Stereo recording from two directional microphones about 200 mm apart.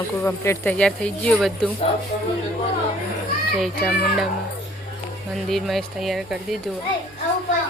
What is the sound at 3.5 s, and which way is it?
Speech, centre (ahead or behind).